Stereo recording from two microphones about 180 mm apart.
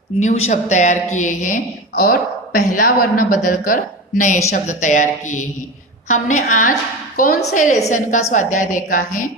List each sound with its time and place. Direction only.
0.2 s a woman's voice: 35° left (ahead or behind)